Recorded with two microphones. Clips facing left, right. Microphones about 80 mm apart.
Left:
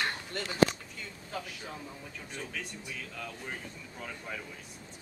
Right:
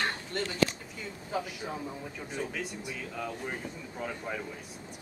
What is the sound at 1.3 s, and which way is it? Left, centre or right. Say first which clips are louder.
Speech: right 6 dB; centre.